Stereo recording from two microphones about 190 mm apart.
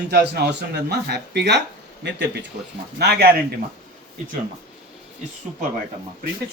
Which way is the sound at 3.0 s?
55° right (ahead or behind).